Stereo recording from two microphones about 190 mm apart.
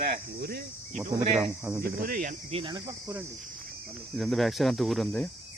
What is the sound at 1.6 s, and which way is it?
Speech, 10° right (ahead or behind).